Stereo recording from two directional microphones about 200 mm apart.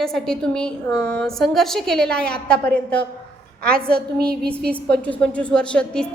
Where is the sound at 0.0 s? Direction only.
5° left (ahead or behind).